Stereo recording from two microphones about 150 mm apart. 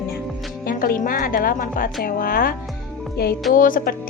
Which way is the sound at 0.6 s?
70° left (ahead or behind).